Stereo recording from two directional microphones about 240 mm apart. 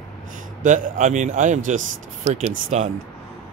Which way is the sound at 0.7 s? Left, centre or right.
Right.